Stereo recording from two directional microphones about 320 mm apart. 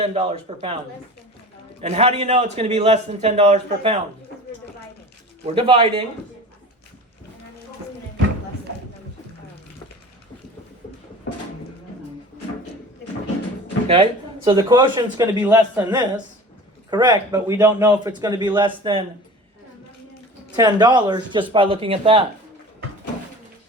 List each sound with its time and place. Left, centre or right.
0.0 s a man's voice: centre
1.8 s a man's voice: centre
5.5 s a man's voice: centre
13.8 s a man's voice: centre
20.6 s a man's voice: centre